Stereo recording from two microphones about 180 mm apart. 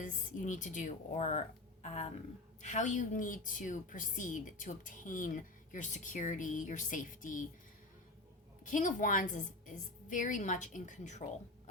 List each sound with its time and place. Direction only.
0.0 s a woman's voice: 45° left (ahead or behind)
8.6 s a woman's voice: 45° left (ahead or behind)